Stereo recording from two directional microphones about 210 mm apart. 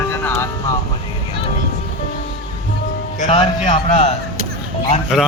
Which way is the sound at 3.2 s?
25° left (ahead or behind).